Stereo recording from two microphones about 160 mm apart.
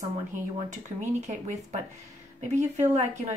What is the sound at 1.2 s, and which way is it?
Speech, 45° right (ahead or behind).